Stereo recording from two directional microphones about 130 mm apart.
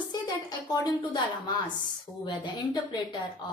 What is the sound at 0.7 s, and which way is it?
Speech, 35° left (ahead or behind).